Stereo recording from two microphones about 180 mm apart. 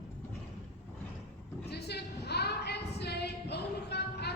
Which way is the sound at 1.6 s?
65° left (ahead or behind).